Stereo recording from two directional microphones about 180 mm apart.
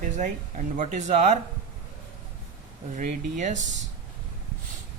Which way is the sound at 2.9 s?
45° right (ahead or behind).